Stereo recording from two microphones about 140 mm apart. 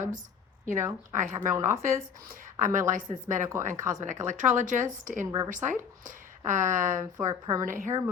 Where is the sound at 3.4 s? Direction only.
20° right (ahead or behind).